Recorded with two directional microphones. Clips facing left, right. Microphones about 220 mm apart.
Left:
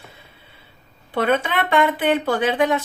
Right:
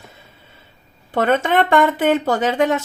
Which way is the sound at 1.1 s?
45° right (ahead or behind).